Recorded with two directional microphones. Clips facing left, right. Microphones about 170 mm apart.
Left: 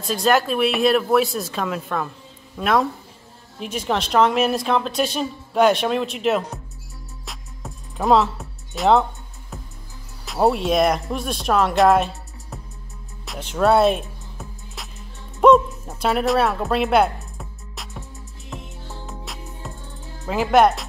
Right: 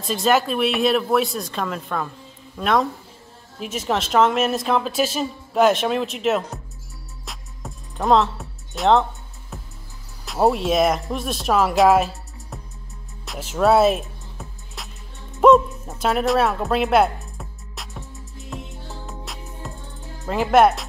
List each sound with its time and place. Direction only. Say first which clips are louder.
0.0 s a woman's voice: even; centre (ahead or behind)
7.2 s music: right 1 dB; centre (ahead or behind)
10.2 s speech: even; centre (ahead or behind)
13.2 s music: even; centre (ahead or behind)
20.2 s a woman's voice: even; centre (ahead or behind)